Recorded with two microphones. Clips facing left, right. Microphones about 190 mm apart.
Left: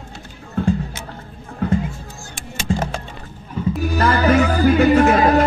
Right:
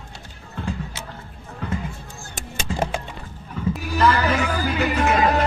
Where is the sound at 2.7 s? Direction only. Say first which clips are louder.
Left 3 dB; 35° left (ahead or behind).